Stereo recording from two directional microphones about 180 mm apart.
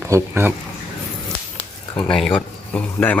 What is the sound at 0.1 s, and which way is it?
Speech, 10° right (ahead or behind).